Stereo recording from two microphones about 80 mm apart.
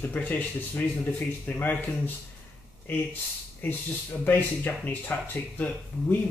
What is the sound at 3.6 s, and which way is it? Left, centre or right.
Speech, left.